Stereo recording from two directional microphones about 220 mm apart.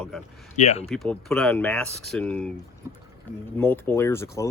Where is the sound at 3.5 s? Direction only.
10° left (ahead or behind).